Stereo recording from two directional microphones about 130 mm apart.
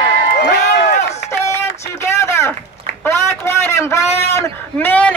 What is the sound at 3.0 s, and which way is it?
A man's voice, 20° left (ahead or behind).